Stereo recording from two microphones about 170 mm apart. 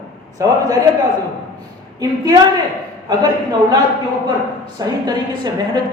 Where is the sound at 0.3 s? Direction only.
20° right (ahead or behind).